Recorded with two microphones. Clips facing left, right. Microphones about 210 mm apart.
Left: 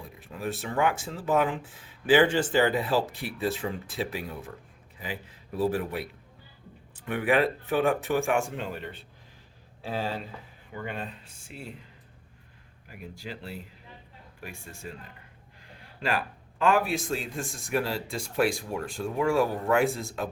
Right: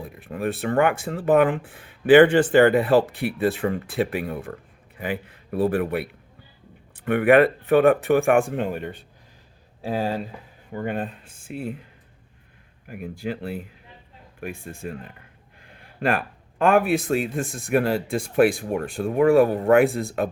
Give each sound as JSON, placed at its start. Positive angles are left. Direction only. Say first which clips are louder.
{"t": 0.0, "sound": "a man's voice", "louder": "right 7 dB", "side_deg": -60}
{"t": 12.9, "sound": "a man's voice", "louder": "right 10 dB", "side_deg": -55}